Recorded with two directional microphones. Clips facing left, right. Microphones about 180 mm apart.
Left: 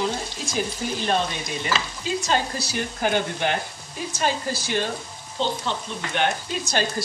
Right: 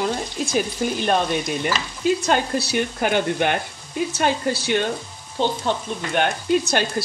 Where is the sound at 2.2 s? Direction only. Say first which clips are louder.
Right 4 dB; 60° right (ahead or behind).